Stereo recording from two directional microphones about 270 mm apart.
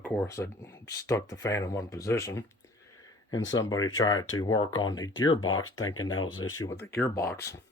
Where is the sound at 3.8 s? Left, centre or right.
Centre.